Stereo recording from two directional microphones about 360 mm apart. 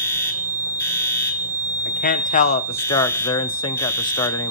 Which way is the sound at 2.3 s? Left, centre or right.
Centre.